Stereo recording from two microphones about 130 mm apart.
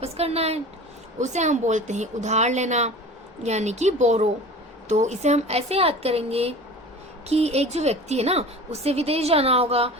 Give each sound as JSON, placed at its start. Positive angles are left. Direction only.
{"t": 0.0, "sound": "speech", "side_deg": -50}
{"t": 1.2, "sound": "a woman's voice", "side_deg": -65}